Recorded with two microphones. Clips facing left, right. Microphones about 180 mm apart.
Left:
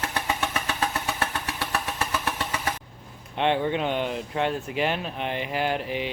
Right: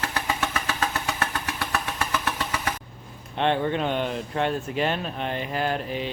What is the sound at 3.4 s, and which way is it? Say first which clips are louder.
Speech: even; 15° left (ahead or behind).